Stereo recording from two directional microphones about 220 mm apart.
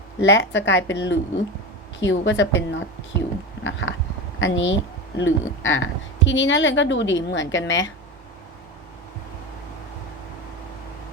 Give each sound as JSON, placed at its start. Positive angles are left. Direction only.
{"t": 0.2, "sound": "speech", "side_deg": 55}